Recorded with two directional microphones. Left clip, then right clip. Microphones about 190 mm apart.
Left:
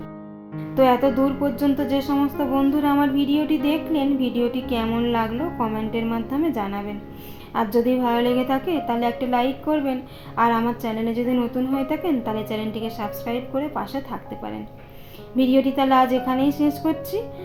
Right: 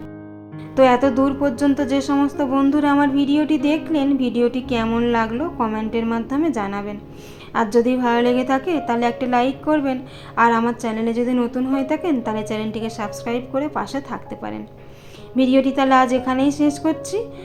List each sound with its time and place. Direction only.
0.8 s a woman's voice: 20° right (ahead or behind)